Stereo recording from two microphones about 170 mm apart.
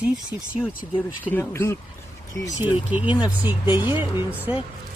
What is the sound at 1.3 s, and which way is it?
Speech, 15° left (ahead or behind).